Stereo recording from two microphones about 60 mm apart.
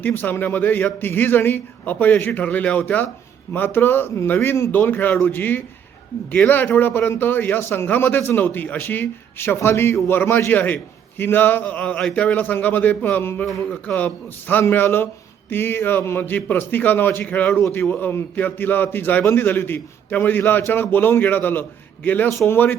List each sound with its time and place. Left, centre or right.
0.0 s speech: left
4.7 s speech: left
13.4 s speech: centre
13.8 s speech: left
20.4 s speech: left